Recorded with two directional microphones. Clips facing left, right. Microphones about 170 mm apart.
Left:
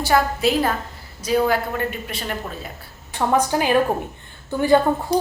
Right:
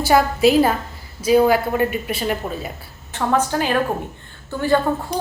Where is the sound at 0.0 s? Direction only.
5° right (ahead or behind).